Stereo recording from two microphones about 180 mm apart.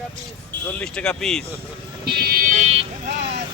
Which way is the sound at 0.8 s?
5° left (ahead or behind).